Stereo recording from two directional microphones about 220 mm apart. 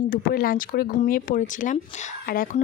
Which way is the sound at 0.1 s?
40° left (ahead or behind).